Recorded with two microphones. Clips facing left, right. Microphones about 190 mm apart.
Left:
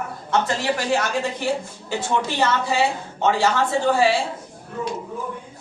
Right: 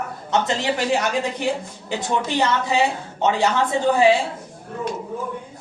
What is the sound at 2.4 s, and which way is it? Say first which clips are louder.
A woman's voice: even; 20° right (ahead or behind).